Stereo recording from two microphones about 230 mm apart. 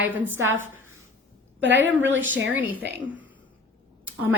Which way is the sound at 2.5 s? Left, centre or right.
Centre.